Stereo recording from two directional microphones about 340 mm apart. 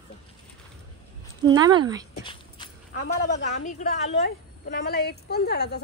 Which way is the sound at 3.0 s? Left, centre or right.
Left.